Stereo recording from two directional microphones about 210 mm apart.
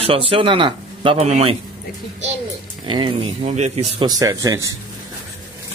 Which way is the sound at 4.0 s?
15° right (ahead or behind).